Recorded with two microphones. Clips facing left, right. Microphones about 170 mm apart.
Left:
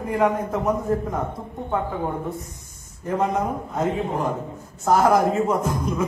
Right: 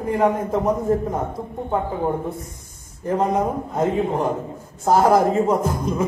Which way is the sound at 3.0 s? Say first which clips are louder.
Right 3 dB; 30° right (ahead or behind).